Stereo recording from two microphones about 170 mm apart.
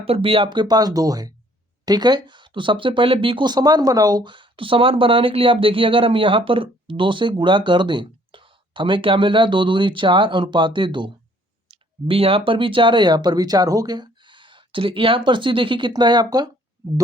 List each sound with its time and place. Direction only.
0.0 s speech: 35° right (ahead or behind)